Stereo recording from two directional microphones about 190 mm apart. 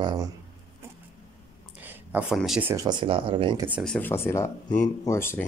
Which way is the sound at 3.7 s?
5° right (ahead or behind).